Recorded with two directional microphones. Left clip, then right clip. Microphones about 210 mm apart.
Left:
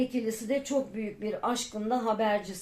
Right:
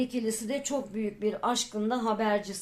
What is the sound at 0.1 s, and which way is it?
A woman's voice, 40° right (ahead or behind).